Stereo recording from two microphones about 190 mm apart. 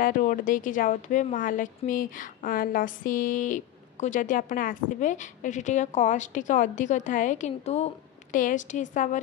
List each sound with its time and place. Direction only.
0.0 s speech: 45° left (ahead or behind)